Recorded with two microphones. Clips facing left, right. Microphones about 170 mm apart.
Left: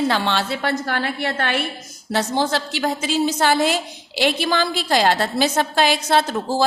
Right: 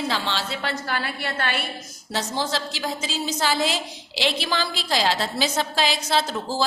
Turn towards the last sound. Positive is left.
turn(degrees=55)  # may be behind; listen again after turning